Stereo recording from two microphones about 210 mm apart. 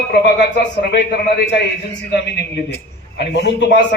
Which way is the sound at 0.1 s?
50° left (ahead or behind).